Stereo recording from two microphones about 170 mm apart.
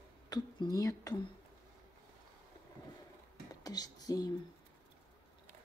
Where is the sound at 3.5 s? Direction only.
20° left (ahead or behind).